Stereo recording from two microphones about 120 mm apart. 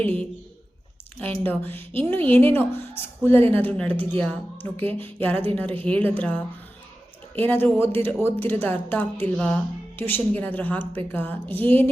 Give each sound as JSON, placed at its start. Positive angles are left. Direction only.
{"t": 0.0, "sound": "speech", "side_deg": 10}
{"t": 1.5, "sound": "speech", "side_deg": 15}